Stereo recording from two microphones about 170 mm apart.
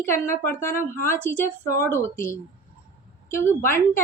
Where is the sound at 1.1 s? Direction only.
50° left (ahead or behind).